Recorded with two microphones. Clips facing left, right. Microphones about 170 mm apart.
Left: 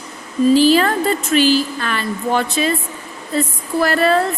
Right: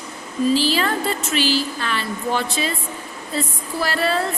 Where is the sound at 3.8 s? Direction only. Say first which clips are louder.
Left 6 dB; 55° left (ahead or behind).